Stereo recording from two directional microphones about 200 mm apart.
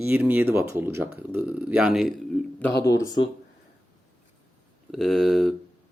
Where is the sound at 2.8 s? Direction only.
15° left (ahead or behind).